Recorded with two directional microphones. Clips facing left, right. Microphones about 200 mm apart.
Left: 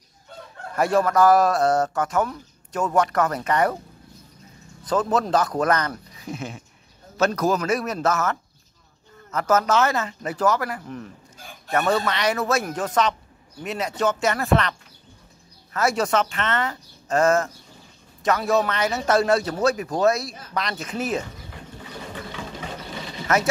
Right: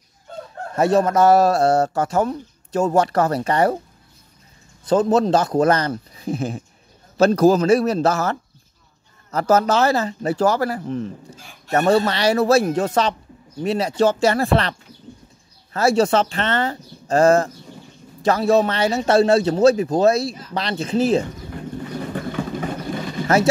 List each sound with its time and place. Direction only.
0.7 s a man's voice: 25° right (ahead or behind)
4.8 s a man's voice: 30° right (ahead or behind)
22.1 s vehicle: 50° right (ahead or behind)
23.2 s speech: 30° right (ahead or behind)